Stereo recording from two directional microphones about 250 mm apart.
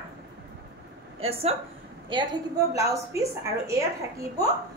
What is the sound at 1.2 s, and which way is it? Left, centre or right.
Speech, right.